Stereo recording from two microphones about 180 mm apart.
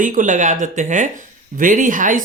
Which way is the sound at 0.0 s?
45° right (ahead or behind).